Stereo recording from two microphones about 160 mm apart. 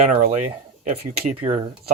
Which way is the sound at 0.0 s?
45° right (ahead or behind).